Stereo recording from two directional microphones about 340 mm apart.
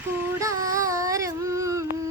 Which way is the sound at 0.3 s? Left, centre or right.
Centre.